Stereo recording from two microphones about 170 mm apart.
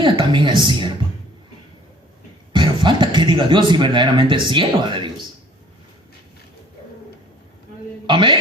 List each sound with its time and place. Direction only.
0.0 s a woman's voice: 30° right (ahead or behind)
2.5 s speech: 30° right (ahead or behind)
8.0 s a man's voice: 25° right (ahead or behind)